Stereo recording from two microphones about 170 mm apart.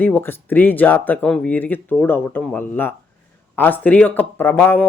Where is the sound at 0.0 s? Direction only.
10° left (ahead or behind).